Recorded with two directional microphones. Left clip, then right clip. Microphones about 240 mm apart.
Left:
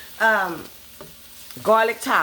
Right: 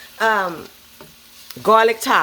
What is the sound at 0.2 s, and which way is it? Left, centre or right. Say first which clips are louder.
Speech: right 1 dB; right.